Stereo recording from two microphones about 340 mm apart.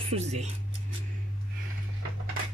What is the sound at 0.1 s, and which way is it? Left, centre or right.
Speech, centre.